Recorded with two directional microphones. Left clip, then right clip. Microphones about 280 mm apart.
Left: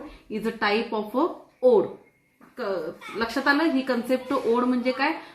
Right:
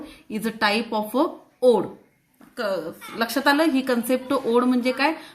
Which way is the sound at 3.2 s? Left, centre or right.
Right.